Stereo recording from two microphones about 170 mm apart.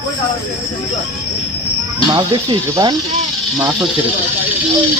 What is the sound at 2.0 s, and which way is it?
Speech, 25° right (ahead or behind).